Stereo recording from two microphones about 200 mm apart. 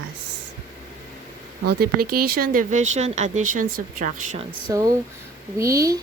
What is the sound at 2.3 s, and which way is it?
Speech, 45° right (ahead or behind).